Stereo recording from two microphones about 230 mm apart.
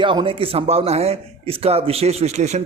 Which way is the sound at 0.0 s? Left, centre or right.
Right.